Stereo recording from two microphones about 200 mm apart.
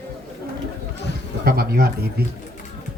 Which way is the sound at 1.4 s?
50° right (ahead or behind).